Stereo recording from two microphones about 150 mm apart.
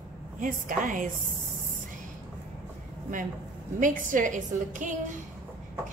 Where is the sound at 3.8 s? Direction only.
60° right (ahead or behind).